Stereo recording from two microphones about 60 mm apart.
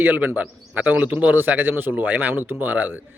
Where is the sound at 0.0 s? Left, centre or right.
Right.